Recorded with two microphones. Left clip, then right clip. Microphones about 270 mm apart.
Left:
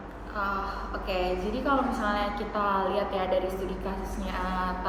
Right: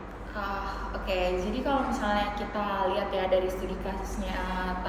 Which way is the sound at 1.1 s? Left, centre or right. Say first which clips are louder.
Right 1 dB; centre.